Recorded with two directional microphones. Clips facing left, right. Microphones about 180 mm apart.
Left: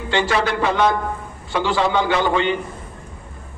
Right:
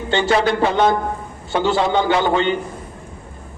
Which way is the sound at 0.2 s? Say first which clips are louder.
Right 4 dB; 30° right (ahead or behind).